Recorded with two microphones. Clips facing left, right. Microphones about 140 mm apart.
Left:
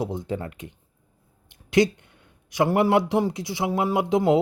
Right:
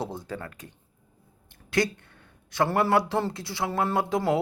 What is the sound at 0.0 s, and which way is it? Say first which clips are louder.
Speech: left 5 dB; 20° left (ahead or behind).